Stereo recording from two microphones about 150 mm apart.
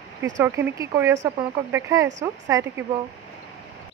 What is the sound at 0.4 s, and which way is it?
Speech, 15° right (ahead or behind).